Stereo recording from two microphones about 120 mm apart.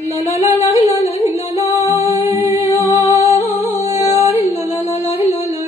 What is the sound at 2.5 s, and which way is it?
Music, 65° left (ahead or behind).